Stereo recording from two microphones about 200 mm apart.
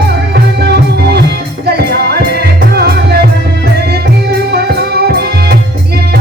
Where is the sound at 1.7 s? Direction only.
55° right (ahead or behind).